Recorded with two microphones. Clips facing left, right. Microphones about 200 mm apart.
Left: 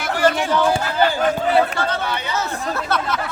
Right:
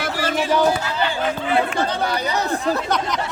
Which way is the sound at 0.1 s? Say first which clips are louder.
Left 7 dB; 55° left (ahead or behind).